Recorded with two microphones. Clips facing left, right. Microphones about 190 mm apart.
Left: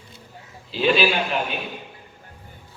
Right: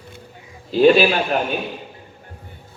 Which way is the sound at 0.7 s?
45° right (ahead or behind).